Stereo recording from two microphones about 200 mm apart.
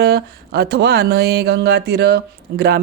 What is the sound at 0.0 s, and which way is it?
Speech, 55° right (ahead or behind).